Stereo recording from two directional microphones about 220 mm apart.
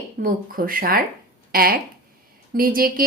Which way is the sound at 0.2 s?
40° right (ahead or behind).